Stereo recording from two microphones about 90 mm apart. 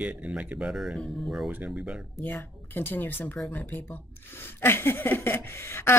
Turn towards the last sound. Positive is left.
turn(degrees=30)  # may be behind; listen again after turning